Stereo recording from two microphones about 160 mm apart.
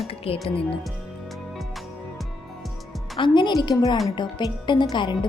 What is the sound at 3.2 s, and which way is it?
A woman's voice, 30° left (ahead or behind).